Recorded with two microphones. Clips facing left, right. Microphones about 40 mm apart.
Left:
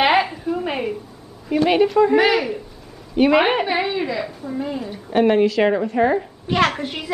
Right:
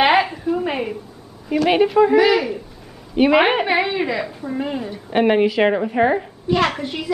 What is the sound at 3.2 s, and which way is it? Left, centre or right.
A woman's voice, centre.